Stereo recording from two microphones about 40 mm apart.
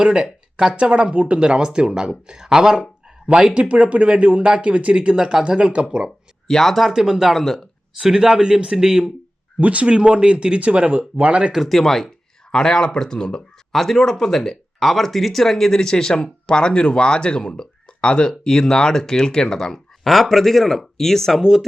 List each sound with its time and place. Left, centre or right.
0.0 s a sound: right
0.8 s speech: right
1.4 s speech: right
3.7 s speech: right
5.1 s speech: centre
6.1 s speech: centre
6.9 s speech: centre
7.3 s speech: centre
8.0 s speech: centre
9.6 s speech: right
9.9 s speech: right
11.7 s speech: centre
13.7 s speech: centre
21.4 s speech: centre